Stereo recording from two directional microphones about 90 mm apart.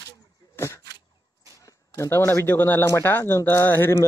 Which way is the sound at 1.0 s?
35° right (ahead or behind).